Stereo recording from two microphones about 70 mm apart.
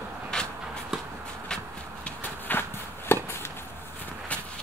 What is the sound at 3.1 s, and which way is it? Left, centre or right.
Chop, left.